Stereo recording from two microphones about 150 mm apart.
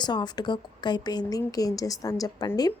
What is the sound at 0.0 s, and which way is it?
Speech, 30° left (ahead or behind).